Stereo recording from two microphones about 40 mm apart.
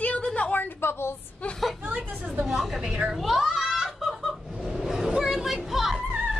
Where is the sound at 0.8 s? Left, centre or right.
Left.